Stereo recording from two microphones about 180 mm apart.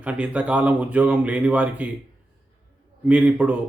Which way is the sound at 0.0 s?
5° right (ahead or behind).